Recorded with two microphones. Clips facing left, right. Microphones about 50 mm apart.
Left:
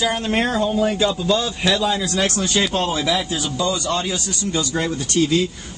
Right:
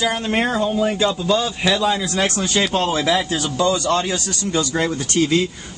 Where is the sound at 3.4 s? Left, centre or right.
Right.